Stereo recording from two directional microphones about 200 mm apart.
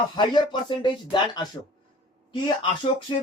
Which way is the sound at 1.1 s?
20° left (ahead or behind).